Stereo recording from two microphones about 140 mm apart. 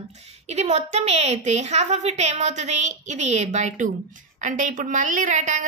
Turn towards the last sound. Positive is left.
turn(degrees=-60)  # may be behind; listen again after turning